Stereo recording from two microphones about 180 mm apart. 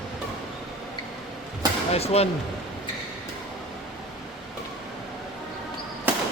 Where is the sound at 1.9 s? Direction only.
35° left (ahead or behind).